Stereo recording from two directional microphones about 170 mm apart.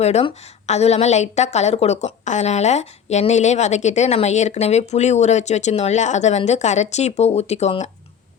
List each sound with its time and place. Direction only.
0.0 s a woman's voice: 40° left (ahead or behind)